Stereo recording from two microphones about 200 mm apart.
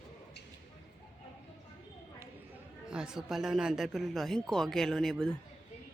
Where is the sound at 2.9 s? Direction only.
5° right (ahead or behind).